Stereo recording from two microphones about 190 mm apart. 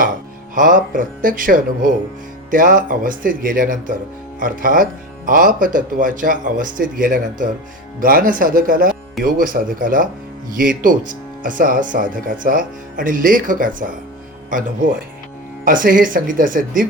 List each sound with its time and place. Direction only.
0.5 s speech: 45° right (ahead or behind)
15.6 s speech: 45° right (ahead or behind)